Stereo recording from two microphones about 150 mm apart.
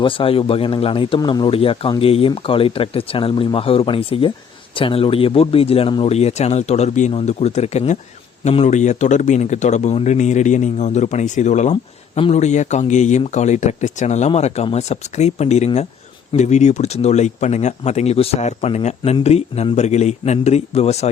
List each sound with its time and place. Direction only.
0.0 s a man's voice: 35° left (ahead or behind)